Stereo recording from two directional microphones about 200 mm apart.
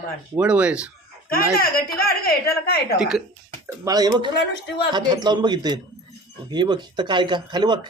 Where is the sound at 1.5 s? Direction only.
50° left (ahead or behind).